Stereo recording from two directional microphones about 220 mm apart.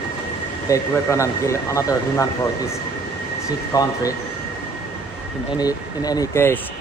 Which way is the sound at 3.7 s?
15° left (ahead or behind).